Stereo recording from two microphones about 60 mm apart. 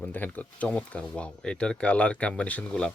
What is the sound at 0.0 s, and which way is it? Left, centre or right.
Speech, left.